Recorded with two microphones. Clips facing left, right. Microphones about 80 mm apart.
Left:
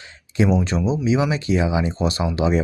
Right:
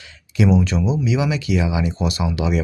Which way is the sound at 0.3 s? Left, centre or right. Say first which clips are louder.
Right 1 dB; left.